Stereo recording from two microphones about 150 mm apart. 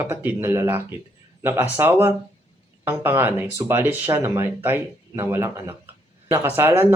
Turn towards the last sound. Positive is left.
turn(degrees=-15)  # may be behind; listen again after turning